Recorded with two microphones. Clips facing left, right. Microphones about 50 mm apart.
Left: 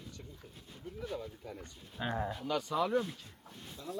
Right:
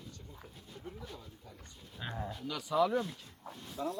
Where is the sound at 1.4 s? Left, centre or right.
Left.